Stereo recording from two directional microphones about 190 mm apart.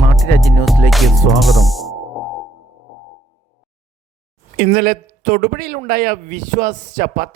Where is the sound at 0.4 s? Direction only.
Centre (ahead or behind).